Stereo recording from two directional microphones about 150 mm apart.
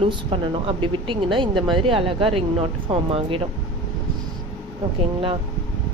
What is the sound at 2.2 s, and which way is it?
Speech, 40° right (ahead or behind).